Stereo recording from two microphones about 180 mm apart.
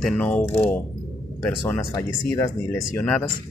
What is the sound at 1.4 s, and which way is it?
Speech, 10° left (ahead or behind).